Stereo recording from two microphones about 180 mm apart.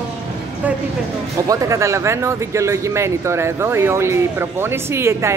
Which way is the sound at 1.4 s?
20° right (ahead or behind).